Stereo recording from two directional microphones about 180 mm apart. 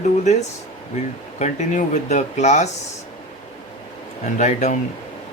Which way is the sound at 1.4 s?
40° left (ahead or behind).